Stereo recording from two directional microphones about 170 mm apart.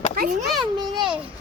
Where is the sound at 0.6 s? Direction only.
25° right (ahead or behind).